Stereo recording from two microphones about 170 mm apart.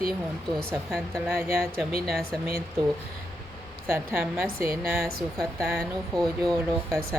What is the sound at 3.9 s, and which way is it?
Speech, 15° right (ahead or behind).